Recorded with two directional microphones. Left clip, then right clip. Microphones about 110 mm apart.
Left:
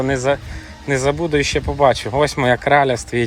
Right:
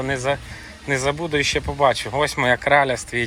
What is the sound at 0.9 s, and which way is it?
Speech, 55° left (ahead or behind).